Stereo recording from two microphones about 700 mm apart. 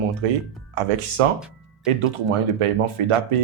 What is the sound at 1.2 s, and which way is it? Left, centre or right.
Speech, right.